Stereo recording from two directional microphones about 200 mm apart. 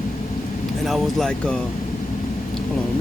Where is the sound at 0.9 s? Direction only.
Centre (ahead or behind).